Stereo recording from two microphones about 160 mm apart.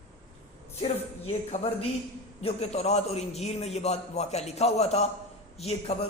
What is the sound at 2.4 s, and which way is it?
A man's voice, 40° left (ahead or behind).